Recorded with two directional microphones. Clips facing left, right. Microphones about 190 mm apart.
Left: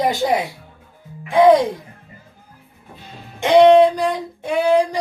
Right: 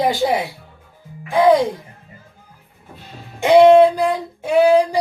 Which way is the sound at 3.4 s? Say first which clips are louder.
Right 1 dB; 5° right (ahead or behind).